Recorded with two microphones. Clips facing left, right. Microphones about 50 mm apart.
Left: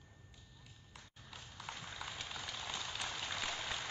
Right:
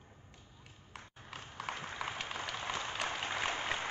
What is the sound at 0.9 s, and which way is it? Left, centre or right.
Horse, right.